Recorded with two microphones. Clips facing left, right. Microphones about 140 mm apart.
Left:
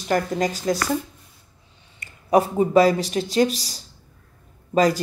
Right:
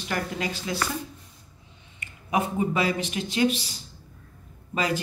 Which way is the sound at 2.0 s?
35° left (ahead or behind).